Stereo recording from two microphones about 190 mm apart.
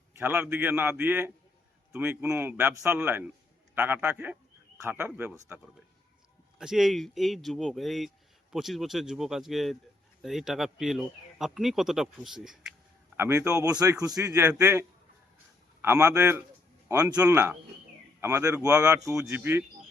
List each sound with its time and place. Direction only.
0.2 s a man's voice: 10° right (ahead or behind)
6.6 s speech: 5° right (ahead or behind)
13.1 s a man's voice: 10° right (ahead or behind)